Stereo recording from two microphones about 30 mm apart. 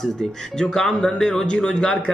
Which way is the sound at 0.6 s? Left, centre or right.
Left.